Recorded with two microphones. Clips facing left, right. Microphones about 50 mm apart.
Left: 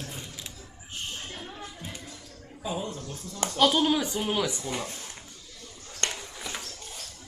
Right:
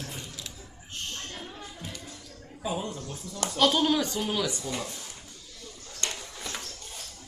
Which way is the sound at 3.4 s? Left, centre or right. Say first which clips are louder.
Left 1 dB; centre.